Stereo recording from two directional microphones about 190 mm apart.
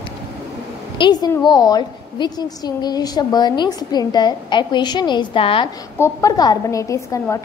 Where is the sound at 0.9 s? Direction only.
25° left (ahead or behind).